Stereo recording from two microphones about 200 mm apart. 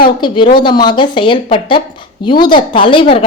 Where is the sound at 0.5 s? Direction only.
25° left (ahead or behind).